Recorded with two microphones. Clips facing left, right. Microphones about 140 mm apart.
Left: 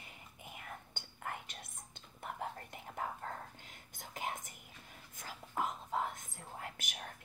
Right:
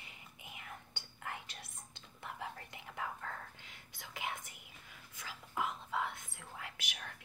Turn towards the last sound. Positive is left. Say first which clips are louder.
# left 2 dB
turn(degrees=40)  # may be behind; listen again after turning